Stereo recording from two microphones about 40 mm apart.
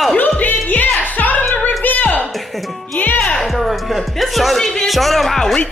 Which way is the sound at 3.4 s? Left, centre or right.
Centre.